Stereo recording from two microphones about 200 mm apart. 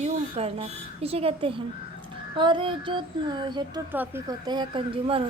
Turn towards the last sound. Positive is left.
turn(degrees=-25)  # may be behind; listen again after turning